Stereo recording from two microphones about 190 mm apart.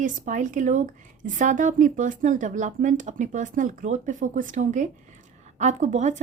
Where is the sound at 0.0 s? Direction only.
40° right (ahead or behind).